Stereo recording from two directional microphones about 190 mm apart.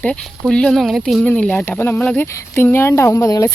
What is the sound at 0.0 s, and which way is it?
Speech, 5° left (ahead or behind).